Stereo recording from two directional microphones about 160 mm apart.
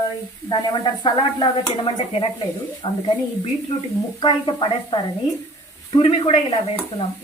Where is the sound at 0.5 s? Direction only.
30° left (ahead or behind).